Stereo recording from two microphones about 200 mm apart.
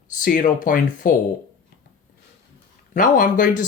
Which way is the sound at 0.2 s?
45° left (ahead or behind).